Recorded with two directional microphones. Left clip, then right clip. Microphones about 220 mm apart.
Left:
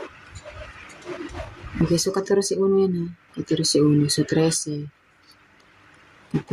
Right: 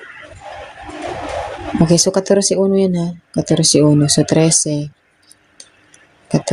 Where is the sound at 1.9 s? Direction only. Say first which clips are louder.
Right 8 dB; 30° right (ahead or behind).